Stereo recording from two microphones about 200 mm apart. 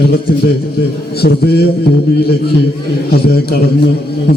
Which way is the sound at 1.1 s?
55° left (ahead or behind).